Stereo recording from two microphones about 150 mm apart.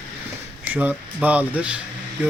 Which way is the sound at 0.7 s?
10° right (ahead or behind).